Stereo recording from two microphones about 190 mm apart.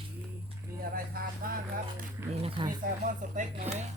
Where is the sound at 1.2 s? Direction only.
50° right (ahead or behind).